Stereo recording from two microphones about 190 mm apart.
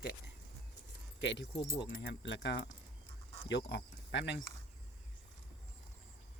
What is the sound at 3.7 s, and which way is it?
Speech, 65° left (ahead or behind).